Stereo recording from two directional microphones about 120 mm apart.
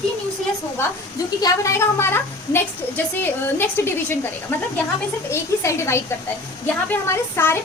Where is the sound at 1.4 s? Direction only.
25° left (ahead or behind).